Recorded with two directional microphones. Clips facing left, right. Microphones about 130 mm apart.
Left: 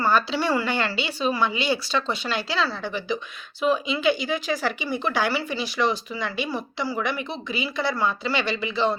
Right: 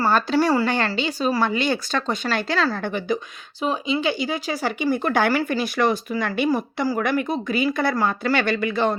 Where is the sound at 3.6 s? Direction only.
35° right (ahead or behind).